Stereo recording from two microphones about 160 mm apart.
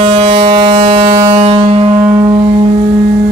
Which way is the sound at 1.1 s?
25° right (ahead or behind).